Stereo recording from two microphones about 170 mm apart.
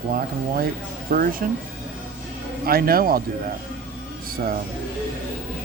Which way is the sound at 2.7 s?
60° right (ahead or behind).